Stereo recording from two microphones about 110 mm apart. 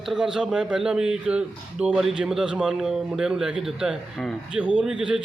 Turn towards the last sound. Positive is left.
turn(degrees=-5)  # may be behind; listen again after turning